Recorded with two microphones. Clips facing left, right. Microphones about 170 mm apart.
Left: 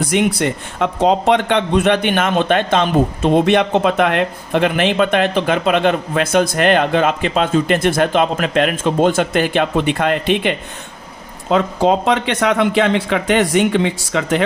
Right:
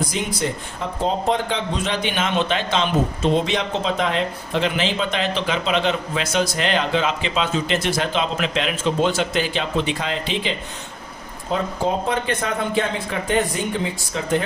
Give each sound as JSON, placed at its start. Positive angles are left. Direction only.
{"t": 0.0, "sound": "a man's voice", "side_deg": 70}
{"t": 11.4, "sound": "a man's voice", "side_deg": 80}